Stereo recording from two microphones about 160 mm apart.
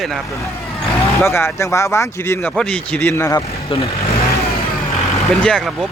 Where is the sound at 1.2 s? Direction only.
15° left (ahead or behind).